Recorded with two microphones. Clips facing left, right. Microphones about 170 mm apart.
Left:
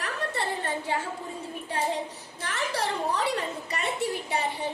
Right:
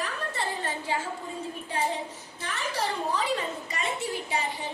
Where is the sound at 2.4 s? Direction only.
70° left (ahead or behind).